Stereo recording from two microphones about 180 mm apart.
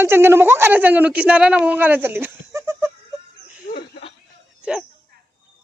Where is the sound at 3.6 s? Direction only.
60° left (ahead or behind).